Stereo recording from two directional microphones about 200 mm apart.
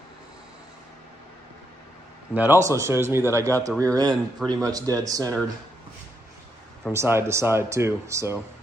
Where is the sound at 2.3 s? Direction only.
10° right (ahead or behind).